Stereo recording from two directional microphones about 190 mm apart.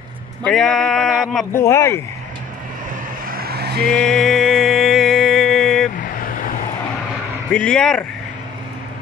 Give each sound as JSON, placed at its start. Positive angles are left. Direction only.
{"t": 0.4, "sound": "speech", "side_deg": 5}
{"t": 1.5, "sound": "speech", "side_deg": 15}
{"t": 3.3, "sound": "vehicle", "side_deg": -55}
{"t": 3.8, "sound": "music", "side_deg": 5}
{"t": 5.9, "sound": "vehicle", "side_deg": 45}
{"t": 7.5, "sound": "speech", "side_deg": 5}